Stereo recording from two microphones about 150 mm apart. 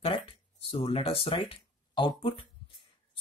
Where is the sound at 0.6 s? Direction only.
35° left (ahead or behind).